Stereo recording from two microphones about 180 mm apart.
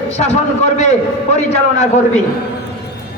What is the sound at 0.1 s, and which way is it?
Speech, 40° left (ahead or behind).